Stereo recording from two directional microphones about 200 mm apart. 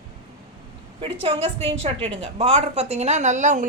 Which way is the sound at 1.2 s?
30° right (ahead or behind).